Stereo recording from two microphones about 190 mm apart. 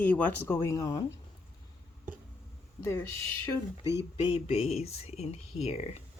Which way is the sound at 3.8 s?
15° right (ahead or behind).